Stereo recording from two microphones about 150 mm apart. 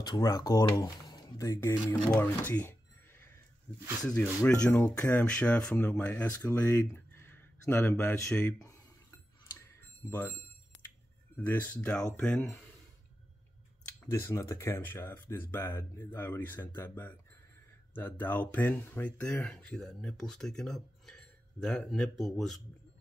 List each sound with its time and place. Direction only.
0.0 s speech: 25° left (ahead or behind)
4.5 s speech: 10° left (ahead or behind)
10.0 s speech: 15° left (ahead or behind)
11.3 s speech: 10° left (ahead or behind)
14.0 s speech: 15° left (ahead or behind); by 22.6 s centre (ahead or behind)